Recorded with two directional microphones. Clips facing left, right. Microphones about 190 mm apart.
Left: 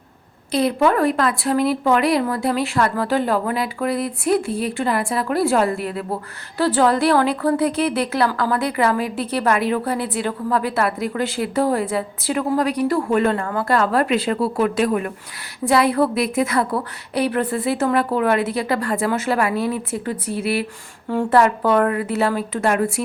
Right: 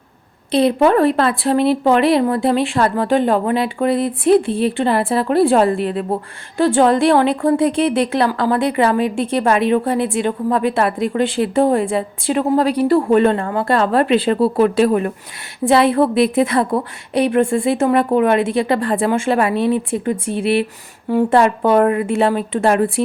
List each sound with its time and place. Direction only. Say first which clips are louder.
0.5 s a woman's voice: right 4 dB; 25° right (ahead or behind)